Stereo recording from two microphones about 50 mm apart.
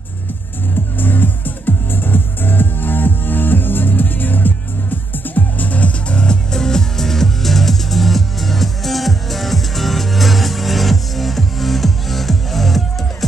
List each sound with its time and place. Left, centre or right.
0.9 s music: left; by 12.8 s centre